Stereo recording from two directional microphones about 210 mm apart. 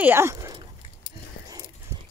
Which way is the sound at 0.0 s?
10° right (ahead or behind).